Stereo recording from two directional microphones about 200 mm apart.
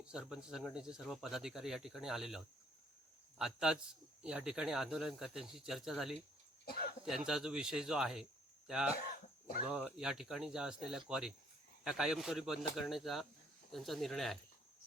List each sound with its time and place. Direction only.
0.0 s speech: 5° right (ahead or behind)
6.7 s speech: 50° left (ahead or behind)
7.0 s speech: 5° right (ahead or behind)